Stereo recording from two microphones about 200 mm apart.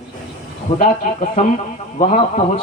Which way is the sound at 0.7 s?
35° left (ahead or behind).